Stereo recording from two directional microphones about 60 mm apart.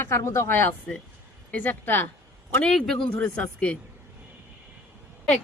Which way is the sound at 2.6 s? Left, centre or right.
Centre.